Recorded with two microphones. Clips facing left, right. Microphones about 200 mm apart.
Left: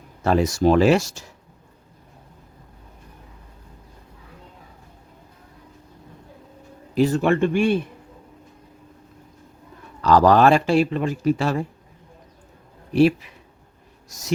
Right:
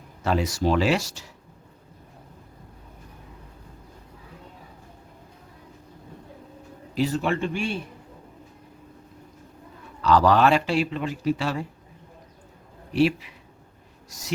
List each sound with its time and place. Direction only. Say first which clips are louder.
0.3 s speech: left 5 dB; 45° left (ahead or behind)
6.9 s a man's voice: left 6 dB; 50° left (ahead or behind)
10.0 s speech: left 4 dB; 45° left (ahead or behind)
12.9 s speech: left 5 dB; 45° left (ahead or behind)